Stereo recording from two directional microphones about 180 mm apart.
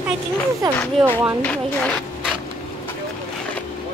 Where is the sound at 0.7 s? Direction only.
10° left (ahead or behind).